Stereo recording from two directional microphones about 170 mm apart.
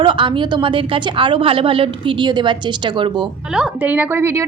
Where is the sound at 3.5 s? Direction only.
5° right (ahead or behind).